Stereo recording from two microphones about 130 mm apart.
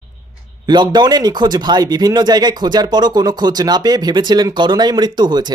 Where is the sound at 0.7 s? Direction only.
35° right (ahead or behind).